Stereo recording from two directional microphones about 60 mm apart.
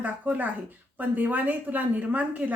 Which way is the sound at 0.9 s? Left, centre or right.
Right.